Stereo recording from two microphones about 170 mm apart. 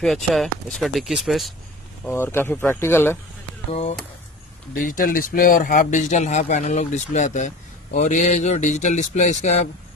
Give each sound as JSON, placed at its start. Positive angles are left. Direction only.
{"t": 0.0, "sound": "speech", "side_deg": 0}
{"t": 2.0, "sound": "speech", "side_deg": 15}
{"t": 4.7, "sound": "a man's voice", "side_deg": 55}